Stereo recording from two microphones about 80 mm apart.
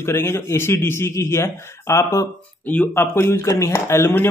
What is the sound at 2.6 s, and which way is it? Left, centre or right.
Speech, left.